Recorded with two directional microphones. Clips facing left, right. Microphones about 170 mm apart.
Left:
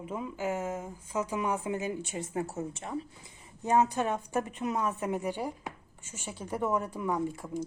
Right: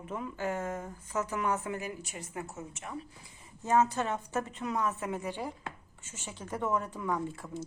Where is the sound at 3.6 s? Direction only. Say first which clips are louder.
Left 1 dB; 15° left (ahead or behind).